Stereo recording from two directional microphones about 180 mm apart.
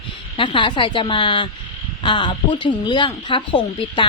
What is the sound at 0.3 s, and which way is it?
A woman's voice, 30° left (ahead or behind).